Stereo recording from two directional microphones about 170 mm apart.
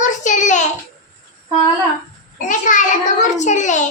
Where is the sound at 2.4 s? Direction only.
50° left (ahead or behind).